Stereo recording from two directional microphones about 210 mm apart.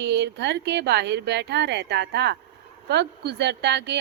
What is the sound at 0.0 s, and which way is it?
A woman's voice, 55° right (ahead or behind).